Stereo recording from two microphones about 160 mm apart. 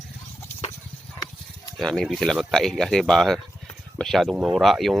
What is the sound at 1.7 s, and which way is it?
Speech, 5° left (ahead or behind).